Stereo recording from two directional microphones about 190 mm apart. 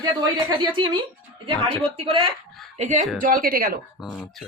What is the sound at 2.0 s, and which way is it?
A woman's voice, 30° right (ahead or behind).